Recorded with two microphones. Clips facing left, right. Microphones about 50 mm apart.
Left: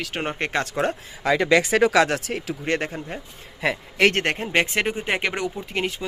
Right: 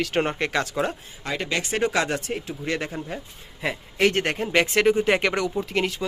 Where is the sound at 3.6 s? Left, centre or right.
Left.